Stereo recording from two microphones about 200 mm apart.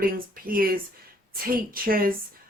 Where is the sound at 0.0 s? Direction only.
45° right (ahead or behind).